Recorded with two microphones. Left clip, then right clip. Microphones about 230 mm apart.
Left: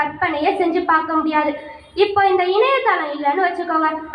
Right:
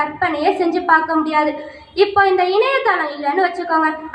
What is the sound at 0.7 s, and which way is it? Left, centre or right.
A woman's voice, right.